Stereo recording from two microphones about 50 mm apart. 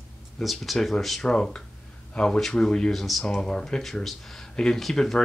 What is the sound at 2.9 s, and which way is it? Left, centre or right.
Speech, centre.